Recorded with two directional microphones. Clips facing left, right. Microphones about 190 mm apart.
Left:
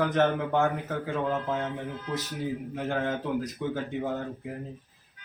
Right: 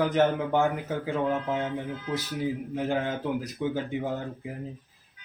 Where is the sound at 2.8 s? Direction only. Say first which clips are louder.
Right 1 dB; 10° right (ahead or behind).